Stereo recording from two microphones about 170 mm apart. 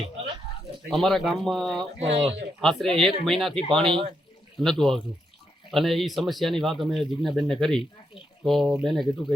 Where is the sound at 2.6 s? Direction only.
Centre (ahead or behind).